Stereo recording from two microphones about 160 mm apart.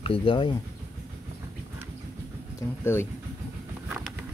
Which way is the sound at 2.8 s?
15° left (ahead or behind).